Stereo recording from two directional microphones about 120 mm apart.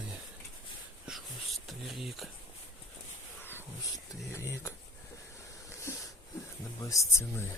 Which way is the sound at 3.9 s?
25° left (ahead or behind).